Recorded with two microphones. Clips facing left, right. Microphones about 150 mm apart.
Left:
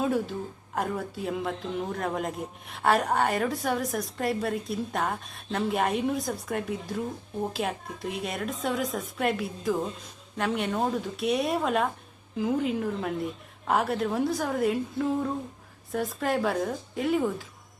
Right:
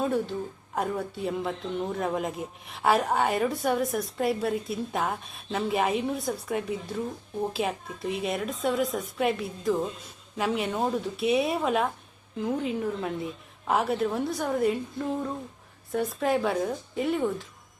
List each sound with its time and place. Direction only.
0.0 s a woman's voice: centre (ahead or behind)